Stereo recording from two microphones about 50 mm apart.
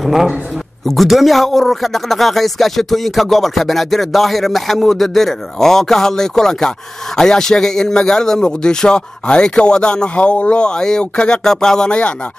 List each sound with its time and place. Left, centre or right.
0.0 s a man's voice: centre